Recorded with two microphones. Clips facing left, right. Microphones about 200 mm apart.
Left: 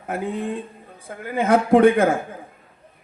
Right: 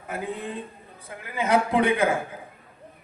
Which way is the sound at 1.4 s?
50° left (ahead or behind).